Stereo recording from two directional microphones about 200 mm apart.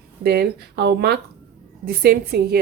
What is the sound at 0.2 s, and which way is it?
Speech, 50° right (ahead or behind).